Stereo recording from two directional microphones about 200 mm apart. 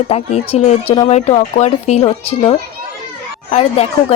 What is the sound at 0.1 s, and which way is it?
A woman's voice, 30° left (ahead or behind).